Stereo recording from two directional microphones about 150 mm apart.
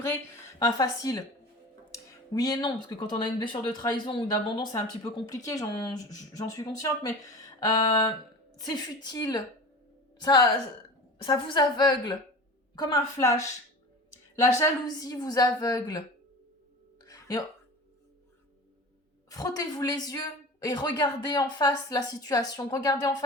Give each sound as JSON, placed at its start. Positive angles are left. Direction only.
{"t": 0.6, "sound": "a woman's voice", "side_deg": 25}
{"t": 17.0, "sound": "music", "side_deg": 25}
{"t": 19.3, "sound": "a woman's voice", "side_deg": 25}